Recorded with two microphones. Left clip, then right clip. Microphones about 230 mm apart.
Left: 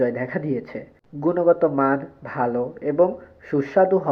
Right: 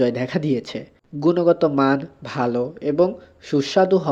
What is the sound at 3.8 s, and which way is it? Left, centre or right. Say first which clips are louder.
Speech: even; right.